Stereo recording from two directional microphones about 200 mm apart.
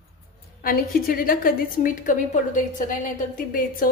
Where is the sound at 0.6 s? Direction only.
45° left (ahead or behind).